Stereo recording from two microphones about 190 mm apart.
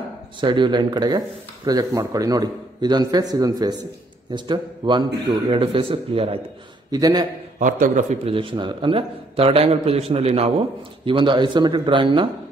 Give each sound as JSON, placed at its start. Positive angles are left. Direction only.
{"t": 0.4, "sound": "a man's voice", "side_deg": -25}
{"t": 7.5, "sound": "a man's voice", "side_deg": -40}
{"t": 8.4, "sound": "a man's voice", "side_deg": -25}